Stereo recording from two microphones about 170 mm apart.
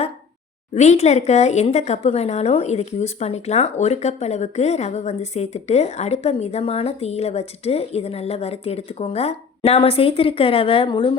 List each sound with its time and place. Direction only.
0.7 s speech: 40° left (ahead or behind)